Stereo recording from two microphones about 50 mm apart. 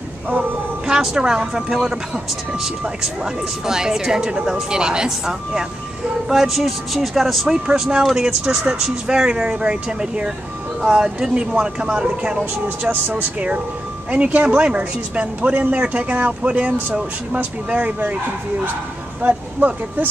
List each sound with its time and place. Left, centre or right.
0.8 s speech: centre
7.4 s speech: centre
14.1 s speech: right
19.2 s speech: right